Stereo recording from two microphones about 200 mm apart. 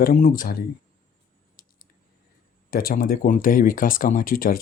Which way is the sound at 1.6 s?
45° left (ahead or behind).